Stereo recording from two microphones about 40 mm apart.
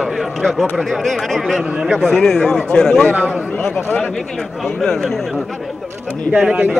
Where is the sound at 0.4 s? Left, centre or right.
Centre.